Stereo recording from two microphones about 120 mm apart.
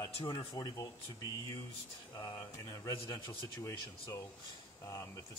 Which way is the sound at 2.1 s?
25° left (ahead or behind).